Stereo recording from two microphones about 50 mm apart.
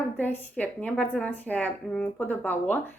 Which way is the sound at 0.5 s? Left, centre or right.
Left.